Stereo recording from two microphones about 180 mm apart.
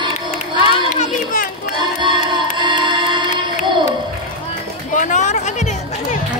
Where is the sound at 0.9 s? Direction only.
45° left (ahead or behind).